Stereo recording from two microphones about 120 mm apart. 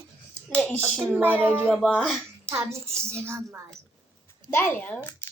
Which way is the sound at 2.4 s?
20° right (ahead or behind).